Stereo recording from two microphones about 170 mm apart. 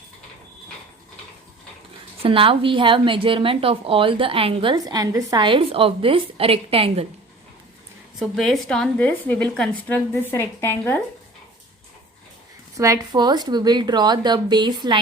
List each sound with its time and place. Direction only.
2.2 s a woman's voice: 30° right (ahead or behind)
8.2 s a woman's voice: centre (ahead or behind)
12.7 s speech: 20° right (ahead or behind)